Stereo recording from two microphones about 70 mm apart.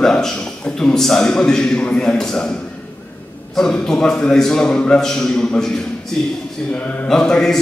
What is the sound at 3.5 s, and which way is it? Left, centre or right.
A man's voice, centre.